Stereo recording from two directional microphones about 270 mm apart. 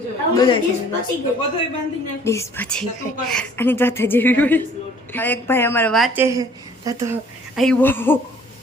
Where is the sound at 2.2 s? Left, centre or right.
Centre.